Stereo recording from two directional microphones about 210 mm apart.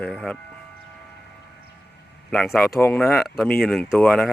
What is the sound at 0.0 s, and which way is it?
Speech, centre (ahead or behind).